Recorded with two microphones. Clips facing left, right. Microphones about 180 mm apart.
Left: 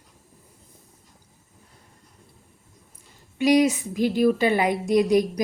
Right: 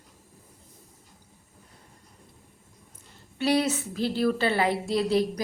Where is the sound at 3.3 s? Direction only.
15° left (ahead or behind).